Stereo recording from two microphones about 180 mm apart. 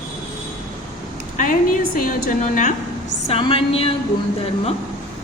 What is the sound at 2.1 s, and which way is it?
Speech, 50° left (ahead or behind).